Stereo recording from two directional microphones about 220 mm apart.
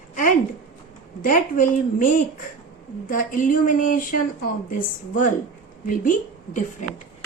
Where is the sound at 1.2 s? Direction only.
35° left (ahead or behind).